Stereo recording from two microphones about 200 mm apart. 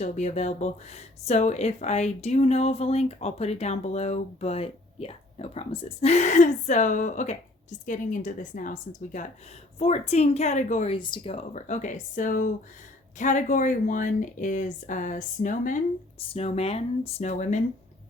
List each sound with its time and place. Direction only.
0.0 s speech: 35° left (ahead or behind)
10.9 s speech: 25° left (ahead or behind); by 15.8 s 40° left (ahead or behind)
16.2 s speech: 30° left (ahead or behind)